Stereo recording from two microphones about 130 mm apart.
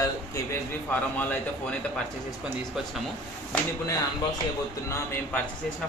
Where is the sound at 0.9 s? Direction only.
10° left (ahead or behind).